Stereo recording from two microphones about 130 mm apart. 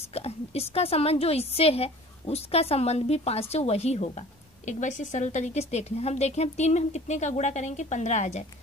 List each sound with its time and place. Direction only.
0.1 s a woman's voice: 50° left (ahead or behind)
4.6 s a woman's voice: 70° left (ahead or behind)